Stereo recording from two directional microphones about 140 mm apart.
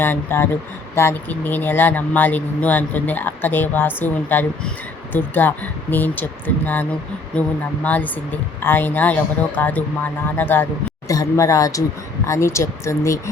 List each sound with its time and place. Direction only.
0.0 s speech: 15° left (ahead or behind)
7.3 s speech: 10° left (ahead or behind)